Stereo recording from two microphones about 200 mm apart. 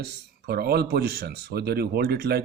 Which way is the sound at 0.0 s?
55° right (ahead or behind).